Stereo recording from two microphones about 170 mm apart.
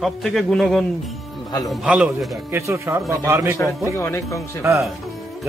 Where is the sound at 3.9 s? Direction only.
15° left (ahead or behind).